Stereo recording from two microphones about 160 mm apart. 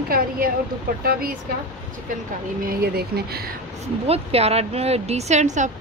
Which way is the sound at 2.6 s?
65° right (ahead or behind).